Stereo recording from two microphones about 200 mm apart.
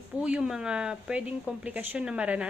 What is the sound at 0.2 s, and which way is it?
Speech, 5° right (ahead or behind).